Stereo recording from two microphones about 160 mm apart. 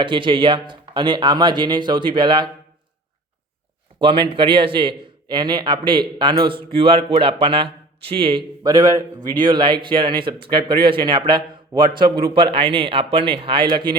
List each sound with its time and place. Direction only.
0.0 s speech: 30° right (ahead or behind)
4.0 s a man's voice: 30° right (ahead or behind)